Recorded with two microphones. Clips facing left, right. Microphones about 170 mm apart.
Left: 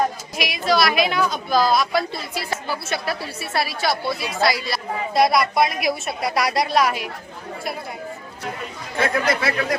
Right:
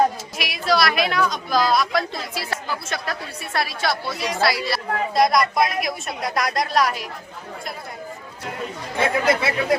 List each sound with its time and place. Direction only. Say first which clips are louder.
0.3 s a woman's voice: left 3 dB; centre (ahead or behind)
9.0 s speech: right 1 dB; 25° right (ahead or behind)